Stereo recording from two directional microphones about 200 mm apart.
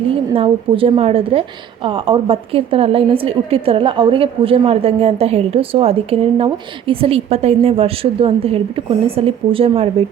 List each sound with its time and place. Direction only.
0.3 s a woman's voice: 30° right (ahead or behind)